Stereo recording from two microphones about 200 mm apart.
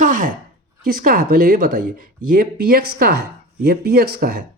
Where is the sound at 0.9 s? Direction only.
45° right (ahead or behind).